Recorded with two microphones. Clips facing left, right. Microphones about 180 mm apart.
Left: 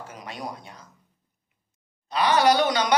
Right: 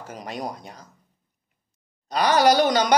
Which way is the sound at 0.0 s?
40° right (ahead or behind).